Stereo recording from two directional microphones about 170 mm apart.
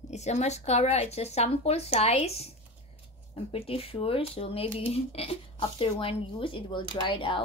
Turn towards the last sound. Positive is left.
turn(degrees=30)  # may be behind; listen again after turning